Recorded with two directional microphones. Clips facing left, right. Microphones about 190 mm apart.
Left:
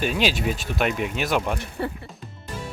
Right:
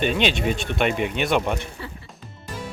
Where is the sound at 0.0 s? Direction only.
5° left (ahead or behind).